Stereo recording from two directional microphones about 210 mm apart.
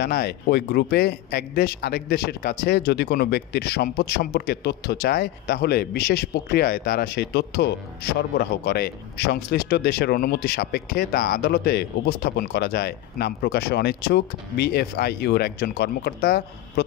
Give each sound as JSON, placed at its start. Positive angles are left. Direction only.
{"t": 0.0, "sound": "a man's voice", "side_deg": 50}